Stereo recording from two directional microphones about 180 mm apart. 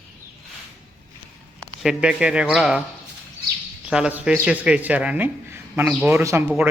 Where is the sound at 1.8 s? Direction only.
5° right (ahead or behind).